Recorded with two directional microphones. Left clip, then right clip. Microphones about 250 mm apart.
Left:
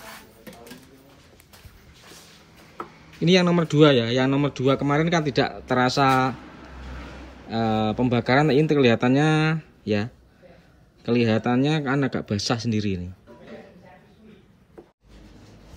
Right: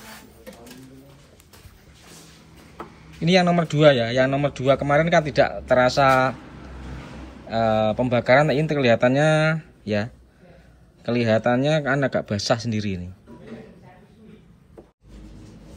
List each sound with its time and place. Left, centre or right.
3.2 s speech: centre
7.4 s speech: centre